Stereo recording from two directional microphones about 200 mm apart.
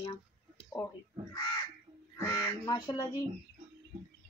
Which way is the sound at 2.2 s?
15° left (ahead or behind).